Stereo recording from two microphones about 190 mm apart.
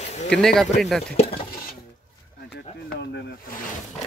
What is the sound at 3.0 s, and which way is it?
Speech, 65° left (ahead or behind).